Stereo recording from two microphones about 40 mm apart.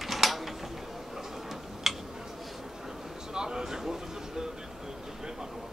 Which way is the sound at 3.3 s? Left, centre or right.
Centre.